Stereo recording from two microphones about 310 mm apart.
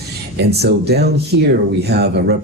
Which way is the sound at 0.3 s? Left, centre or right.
Right.